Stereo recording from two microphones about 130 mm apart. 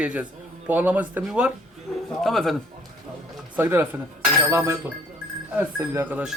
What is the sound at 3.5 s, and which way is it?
Speech, 15° right (ahead or behind).